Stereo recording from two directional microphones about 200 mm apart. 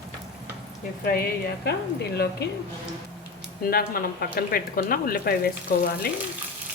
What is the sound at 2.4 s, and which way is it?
Speech, 60° left (ahead or behind).